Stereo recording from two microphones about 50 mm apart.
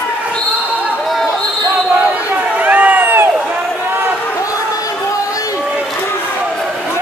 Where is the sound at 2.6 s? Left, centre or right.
Right.